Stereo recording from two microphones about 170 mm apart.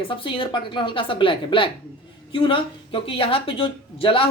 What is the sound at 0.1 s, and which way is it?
A woman's voice, 30° left (ahead or behind).